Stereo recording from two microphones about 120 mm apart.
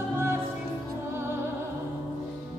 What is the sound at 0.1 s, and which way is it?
Music, 20° right (ahead or behind).